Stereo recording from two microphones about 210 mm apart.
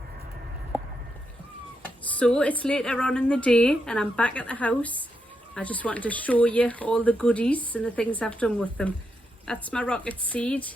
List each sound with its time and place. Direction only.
2.1 s a woman's voice: 5° left (ahead or behind)